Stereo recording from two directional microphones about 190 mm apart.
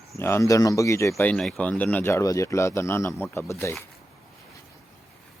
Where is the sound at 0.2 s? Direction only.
15° left (ahead or behind).